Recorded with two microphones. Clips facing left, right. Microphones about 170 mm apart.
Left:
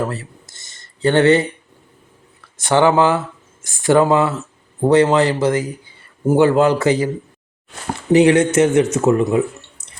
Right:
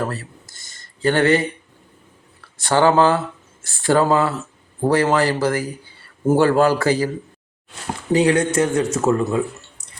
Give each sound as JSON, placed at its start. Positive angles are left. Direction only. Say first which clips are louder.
{"t": 0.1, "sound": "a sound", "louder": "left 2 dB", "side_deg": 20}
{"t": 2.6, "sound": "a man's voice", "louder": "left 1 dB", "side_deg": 20}
{"t": 8.1, "sound": "a man's voice", "louder": "left 5 dB", "side_deg": 25}